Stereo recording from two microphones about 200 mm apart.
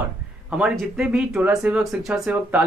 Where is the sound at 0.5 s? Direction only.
5° right (ahead or behind).